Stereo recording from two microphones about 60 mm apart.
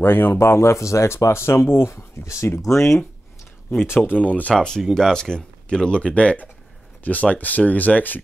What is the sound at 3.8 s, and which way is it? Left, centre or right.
Speech, left.